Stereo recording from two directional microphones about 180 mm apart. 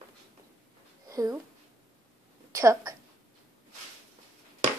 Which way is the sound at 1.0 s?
20° right (ahead or behind).